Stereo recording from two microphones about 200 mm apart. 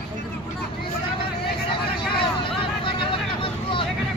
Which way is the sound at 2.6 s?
25° left (ahead or behind).